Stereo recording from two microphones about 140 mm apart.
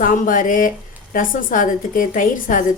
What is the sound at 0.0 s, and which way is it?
A woman's voice, 70° left (ahead or behind).